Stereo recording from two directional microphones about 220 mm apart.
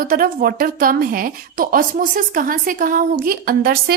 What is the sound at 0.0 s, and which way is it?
A woman's voice, 40° right (ahead or behind).